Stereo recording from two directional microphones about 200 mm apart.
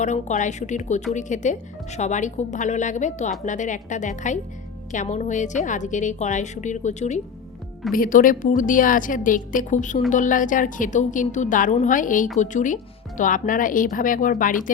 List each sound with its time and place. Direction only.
0.0 s a woman's voice: 35° left (ahead or behind)